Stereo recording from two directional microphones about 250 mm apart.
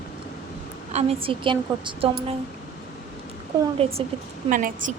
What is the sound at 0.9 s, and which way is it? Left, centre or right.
A woman's voice, right.